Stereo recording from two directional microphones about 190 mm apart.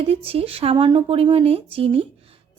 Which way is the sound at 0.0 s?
30° right (ahead or behind).